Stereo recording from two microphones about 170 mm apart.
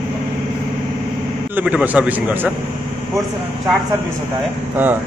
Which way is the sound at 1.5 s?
10° right (ahead or behind).